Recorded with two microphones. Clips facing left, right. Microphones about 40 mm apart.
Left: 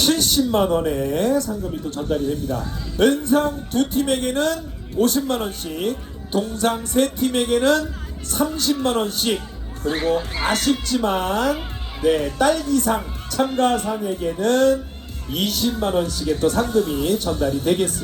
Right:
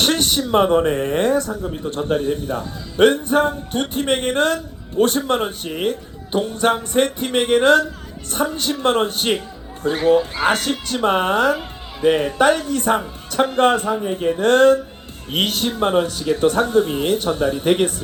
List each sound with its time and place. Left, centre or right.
0.0 s speech: right
15.7 s speech: right